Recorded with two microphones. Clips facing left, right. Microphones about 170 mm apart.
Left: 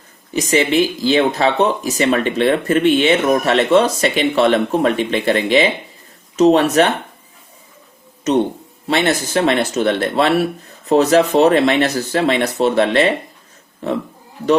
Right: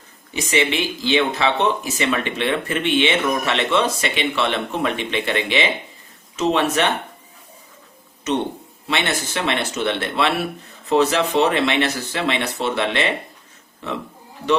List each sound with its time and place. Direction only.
0.3 s speech: 40° left (ahead or behind)
8.3 s speech: 40° left (ahead or behind)